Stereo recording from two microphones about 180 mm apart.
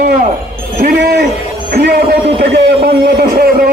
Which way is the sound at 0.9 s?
70° right (ahead or behind).